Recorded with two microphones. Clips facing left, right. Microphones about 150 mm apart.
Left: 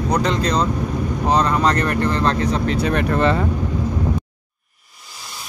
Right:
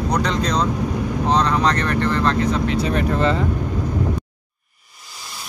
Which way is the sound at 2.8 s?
60° left (ahead or behind).